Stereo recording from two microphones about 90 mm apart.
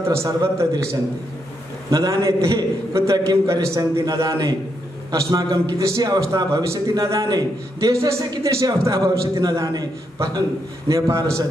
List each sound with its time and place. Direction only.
0.0 s a man's voice: 30° right (ahead or behind)
1.9 s a man's voice: 40° right (ahead or behind)
7.9 s a man's voice: 30° right (ahead or behind)
10.9 s a man's voice: 35° right (ahead or behind)